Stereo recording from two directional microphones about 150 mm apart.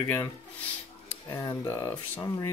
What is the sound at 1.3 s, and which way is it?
Speech, 20° left (ahead or behind).